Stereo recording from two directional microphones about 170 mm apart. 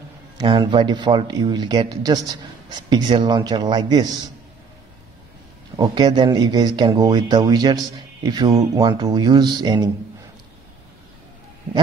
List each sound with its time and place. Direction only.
0.4 s speech: 25° right (ahead or behind)
5.8 s speech: 25° right (ahead or behind)